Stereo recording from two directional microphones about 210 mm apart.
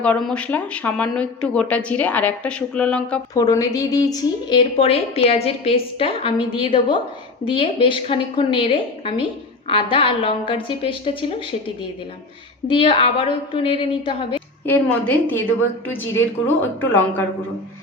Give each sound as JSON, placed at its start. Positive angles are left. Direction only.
{"t": 0.0, "sound": "speech", "side_deg": 5}
{"t": 3.3, "sound": "a woman's voice", "side_deg": 15}
{"t": 12.6, "sound": "a woman's voice", "side_deg": 25}
{"t": 14.7, "sound": "a woman's voice", "side_deg": 10}